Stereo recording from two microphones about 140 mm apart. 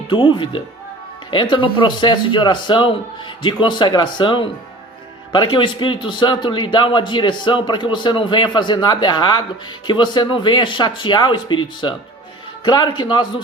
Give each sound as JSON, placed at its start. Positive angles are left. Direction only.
{"t": 0.1, "sound": "a man's voice", "side_deg": 35}